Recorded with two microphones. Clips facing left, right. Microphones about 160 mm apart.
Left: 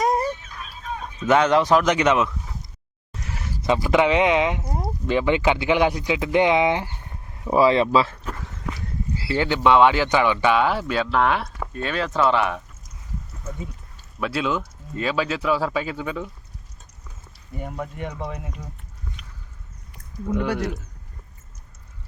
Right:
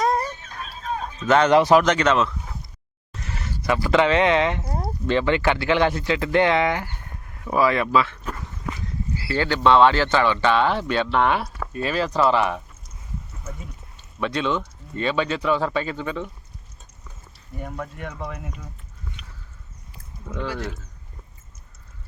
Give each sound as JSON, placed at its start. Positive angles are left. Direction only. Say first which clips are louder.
{"t": 0.4, "sound": "a sound", "louder": "right 3 dB", "side_deg": -40}
{"t": 1.3, "sound": "speech", "louder": "right 1 dB", "side_deg": 5}
{"t": 1.5, "sound": "speech", "louder": "right 2 dB", "side_deg": -5}
{"t": 1.8, "sound": "speech", "louder": "even", "side_deg": 15}
{"t": 3.2, "sound": "a sound", "louder": "even", "side_deg": 10}
{"t": 3.6, "sound": "speech", "louder": "left 1 dB", "side_deg": 20}
{"t": 9.1, "sound": "speech", "louder": "left 1 dB", "side_deg": 20}
{"t": 14.2, "sound": "speech", "louder": "even", "side_deg": 5}
{"t": 17.5, "sound": "speech", "louder": "left 1 dB", "side_deg": 15}
{"t": 20.3, "sound": "speech", "louder": "left 5 dB", "side_deg": 15}